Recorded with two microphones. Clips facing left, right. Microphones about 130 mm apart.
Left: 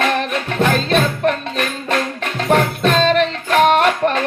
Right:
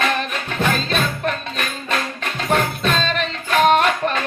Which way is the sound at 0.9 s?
65° left (ahead or behind).